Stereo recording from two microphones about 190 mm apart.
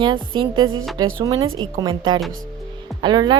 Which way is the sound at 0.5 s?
90° right.